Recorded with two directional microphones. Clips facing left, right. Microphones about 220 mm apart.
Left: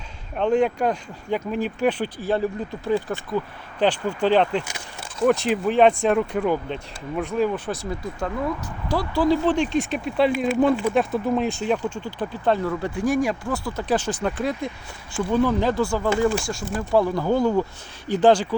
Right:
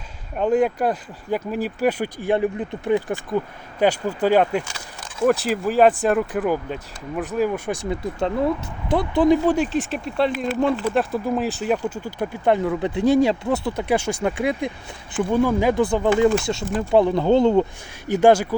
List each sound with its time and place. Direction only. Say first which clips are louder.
0.3 s speech: right 1 dB; 5° right (ahead or behind)
7.9 s speech: right 4 dB; 20° right (ahead or behind)
9.6 s speech: even; centre (ahead or behind); by 13.8 s 20° right (ahead or behind)
13.8 s speech: left 1 dB; 10° right (ahead or behind)
18.1 s speech: right 2 dB; 10° right (ahead or behind)